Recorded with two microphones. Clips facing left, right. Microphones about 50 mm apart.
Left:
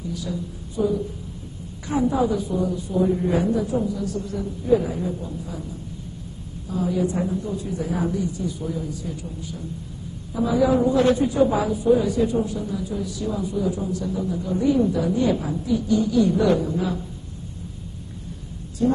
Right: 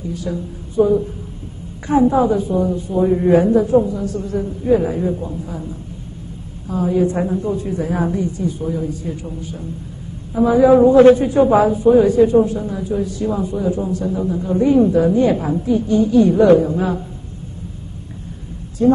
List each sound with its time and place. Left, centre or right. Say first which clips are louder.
0.1 s a man's voice: right 5 dB; right
6.7 s a man's voice: right 6 dB; right
18.8 s speech: right 7 dB; right